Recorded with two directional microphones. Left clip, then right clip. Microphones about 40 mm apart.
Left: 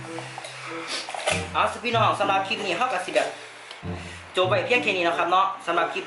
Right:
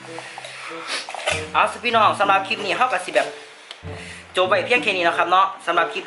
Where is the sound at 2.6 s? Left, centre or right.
Centre.